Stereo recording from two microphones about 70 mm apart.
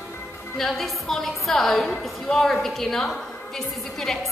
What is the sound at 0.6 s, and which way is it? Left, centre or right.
A woman's voice, centre.